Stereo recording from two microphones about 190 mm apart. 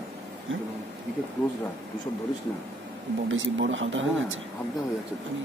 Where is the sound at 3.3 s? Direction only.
85° right.